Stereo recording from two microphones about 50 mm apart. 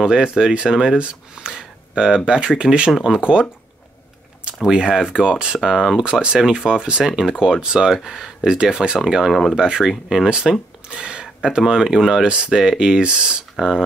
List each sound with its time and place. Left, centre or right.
0.0 s speech: centre
4.6 s speech: centre